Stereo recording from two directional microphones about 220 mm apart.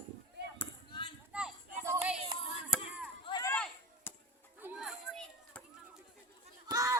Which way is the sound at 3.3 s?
15° left (ahead or behind).